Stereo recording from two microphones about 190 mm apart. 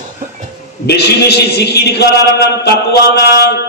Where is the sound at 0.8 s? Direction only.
60° left (ahead or behind).